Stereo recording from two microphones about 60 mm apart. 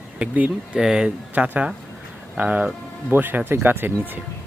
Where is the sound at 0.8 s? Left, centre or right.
Centre.